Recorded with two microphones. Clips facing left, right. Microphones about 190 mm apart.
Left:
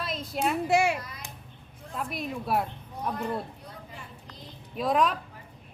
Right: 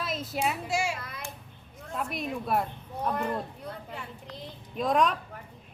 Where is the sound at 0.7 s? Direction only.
60° left (ahead or behind).